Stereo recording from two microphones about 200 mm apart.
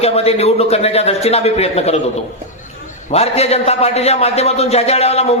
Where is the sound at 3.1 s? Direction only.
30° left (ahead or behind).